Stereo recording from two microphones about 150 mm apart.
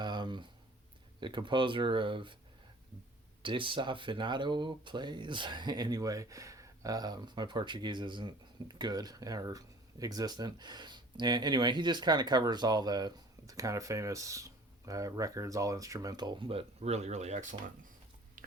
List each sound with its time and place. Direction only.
0.0 s a sound: 30° right (ahead or behind)
1.2 s speech: 30° right (ahead or behind)
3.4 s speech: 35° right (ahead or behind); by 17.6 s 50° right (ahead or behind)